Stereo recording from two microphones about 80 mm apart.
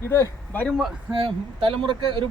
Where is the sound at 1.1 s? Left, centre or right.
Right.